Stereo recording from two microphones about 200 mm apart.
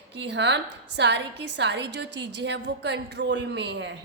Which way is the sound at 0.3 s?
60° right (ahead or behind).